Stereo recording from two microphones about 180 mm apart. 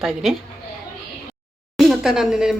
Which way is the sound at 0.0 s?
Centre (ahead or behind).